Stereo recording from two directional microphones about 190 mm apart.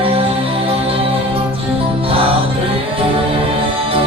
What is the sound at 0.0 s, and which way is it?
Music, 30° right (ahead or behind).